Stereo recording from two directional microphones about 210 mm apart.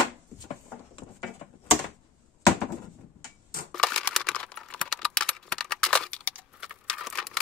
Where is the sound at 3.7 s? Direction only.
5° left (ahead or behind).